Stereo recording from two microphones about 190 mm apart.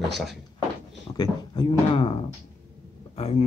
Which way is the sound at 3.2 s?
30° left (ahead or behind).